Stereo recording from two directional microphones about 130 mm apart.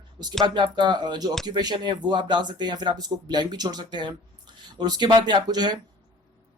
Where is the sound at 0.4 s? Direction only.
35° right (ahead or behind).